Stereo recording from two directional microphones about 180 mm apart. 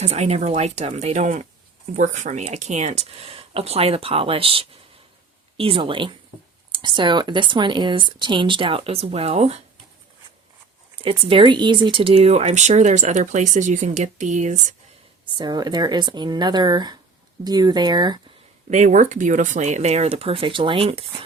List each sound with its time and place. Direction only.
0.0 s speech: 35° right (ahead or behind)
10.9 s speech: 30° right (ahead or behind)
15.4 s speech: 25° right (ahead or behind)
18.7 s speech: 45° right (ahead or behind)